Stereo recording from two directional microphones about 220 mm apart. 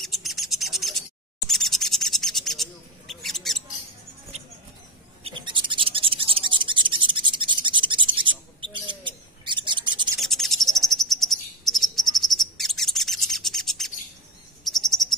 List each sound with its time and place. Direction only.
0.0 s bird: centre (ahead or behind)
5.2 s a sound: 20° right (ahead or behind)
8.7 s bird: 20° right (ahead or behind)
10.2 s cricket: centre (ahead or behind)